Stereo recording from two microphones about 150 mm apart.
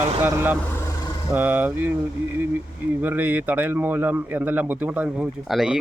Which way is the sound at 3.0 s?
10° right (ahead or behind).